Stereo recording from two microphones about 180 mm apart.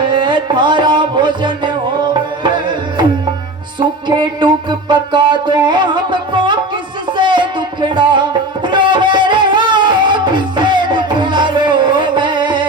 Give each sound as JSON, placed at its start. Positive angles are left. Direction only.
{"t": 0.1, "sound": "music", "side_deg": -25}
{"t": 2.4, "sound": "tabla", "side_deg": -25}
{"t": 3.8, "sound": "music", "side_deg": -25}